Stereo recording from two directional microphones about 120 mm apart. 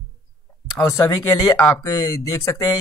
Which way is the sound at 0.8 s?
25° left (ahead or behind).